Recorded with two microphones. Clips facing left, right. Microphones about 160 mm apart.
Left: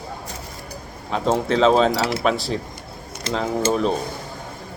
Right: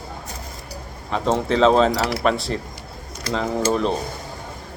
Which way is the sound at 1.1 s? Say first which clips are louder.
Even; centre (ahead or behind).